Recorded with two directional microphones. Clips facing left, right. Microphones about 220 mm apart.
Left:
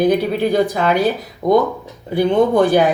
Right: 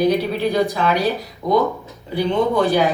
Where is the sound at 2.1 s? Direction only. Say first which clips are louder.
Left 4 dB; 50° left (ahead or behind).